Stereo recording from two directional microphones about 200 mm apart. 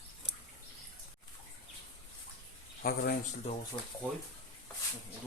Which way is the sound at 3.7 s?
20° left (ahead or behind).